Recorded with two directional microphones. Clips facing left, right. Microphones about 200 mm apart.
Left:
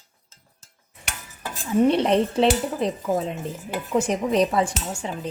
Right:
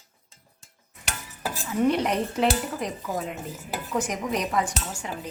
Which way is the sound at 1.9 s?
30° left (ahead or behind).